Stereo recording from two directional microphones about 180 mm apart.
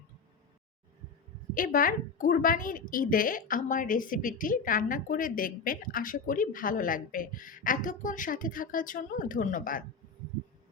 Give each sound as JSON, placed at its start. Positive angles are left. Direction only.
{"t": 1.5, "sound": "a woman's voice", "side_deg": 50}